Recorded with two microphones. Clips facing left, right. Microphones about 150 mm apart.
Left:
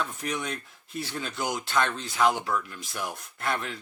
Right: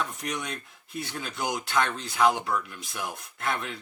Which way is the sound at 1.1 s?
5° right (ahead or behind).